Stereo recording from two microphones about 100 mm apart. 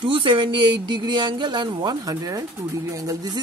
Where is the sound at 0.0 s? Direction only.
55° right (ahead or behind).